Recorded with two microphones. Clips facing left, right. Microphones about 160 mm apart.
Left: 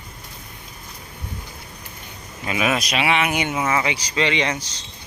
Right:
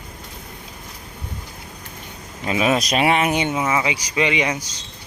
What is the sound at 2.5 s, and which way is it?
Speech, 30° right (ahead or behind).